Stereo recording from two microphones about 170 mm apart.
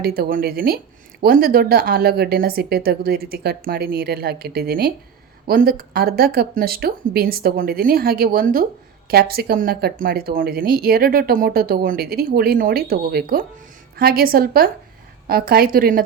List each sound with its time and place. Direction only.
0.0 s speech: 65° right (ahead or behind)